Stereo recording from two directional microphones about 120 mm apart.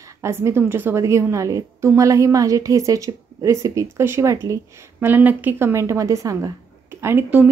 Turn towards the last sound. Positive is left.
turn(degrees=-15)  # may be behind; listen again after turning